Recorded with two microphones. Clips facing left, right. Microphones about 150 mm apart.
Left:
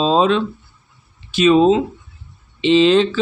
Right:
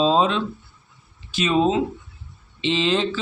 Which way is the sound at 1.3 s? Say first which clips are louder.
Left 10 dB; 75° left (ahead or behind).